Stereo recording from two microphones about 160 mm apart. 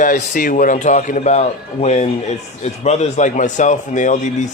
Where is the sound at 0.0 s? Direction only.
60° left (ahead or behind).